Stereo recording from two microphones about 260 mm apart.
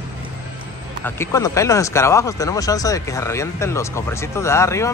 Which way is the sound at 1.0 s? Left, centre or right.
Centre.